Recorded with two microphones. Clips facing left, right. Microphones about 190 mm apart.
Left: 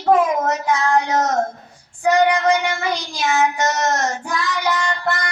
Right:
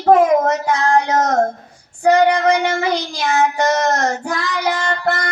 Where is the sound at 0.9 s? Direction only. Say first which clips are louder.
Right 4 dB; 55° right (ahead or behind).